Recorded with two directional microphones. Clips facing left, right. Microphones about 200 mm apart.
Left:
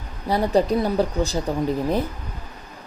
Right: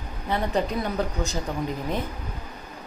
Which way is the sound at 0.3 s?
35° left (ahead or behind).